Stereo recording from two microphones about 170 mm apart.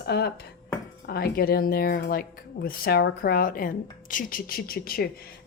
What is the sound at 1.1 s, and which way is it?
A woman's voice, 65° left (ahead or behind).